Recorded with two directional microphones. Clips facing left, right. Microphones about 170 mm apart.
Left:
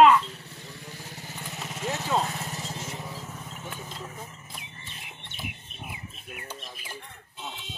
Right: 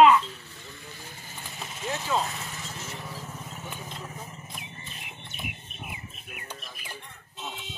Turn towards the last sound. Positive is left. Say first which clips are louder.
# left 2 dB
turn(degrees=30)  # may be behind; listen again after turning